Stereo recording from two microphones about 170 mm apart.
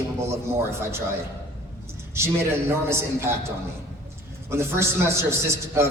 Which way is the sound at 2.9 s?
15° right (ahead or behind).